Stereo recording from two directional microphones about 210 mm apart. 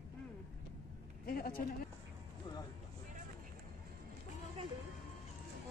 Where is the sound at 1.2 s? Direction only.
45° left (ahead or behind).